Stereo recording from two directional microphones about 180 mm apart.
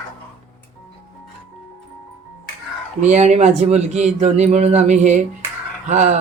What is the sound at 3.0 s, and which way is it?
Music, 40° right (ahead or behind).